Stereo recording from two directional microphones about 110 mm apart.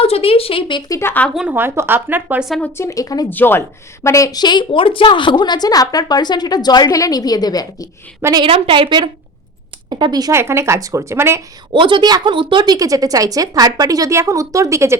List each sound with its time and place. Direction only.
0.0 s speech: 60° left (ahead or behind)
0.9 s speech: 25° left (ahead or behind)
1.3 s a woman's voice: 5° right (ahead or behind)
1.5 s speech: 20° right (ahead or behind)
2.7 s a woman's voice: 30° left (ahead or behind)
3.2 s a woman's voice: 20° left (ahead or behind); by 7.9 s 35° left (ahead or behind)
8.2 s a woman's voice: 30° right (ahead or behind)
8.4 s a woman's voice: 55° right (ahead or behind); by 10.3 s 35° right (ahead or behind)
10.3 s speech: 25° right (ahead or behind)
11.7 s a woman's voice: 45° right (ahead or behind); by 14.9 s 25° right (ahead or behind)